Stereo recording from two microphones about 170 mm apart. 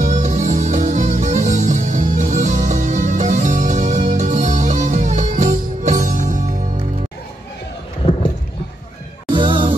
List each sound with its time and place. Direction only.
0.0 s music: 45° right (ahead or behind)
9.3 s music: 30° right (ahead or behind)